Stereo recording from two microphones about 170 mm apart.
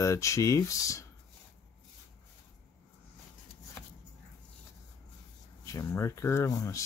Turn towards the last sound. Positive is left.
turn(degrees=20)  # may be behind; listen again after turning